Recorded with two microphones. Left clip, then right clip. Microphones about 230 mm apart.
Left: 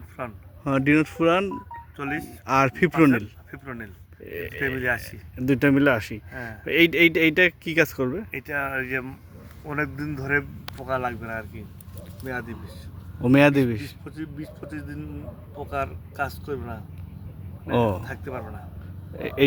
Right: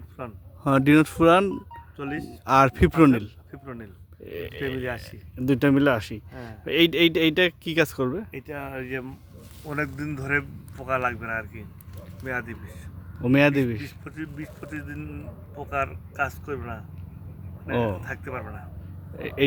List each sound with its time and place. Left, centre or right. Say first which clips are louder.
0.2 s speech: left 4 dB; centre
0.6 s speech: right 2 dB; centre
2.0 s speech: left 3 dB; centre
2.4 s speech: right 2 dB; centre
3.5 s speech: left 5 dB; centre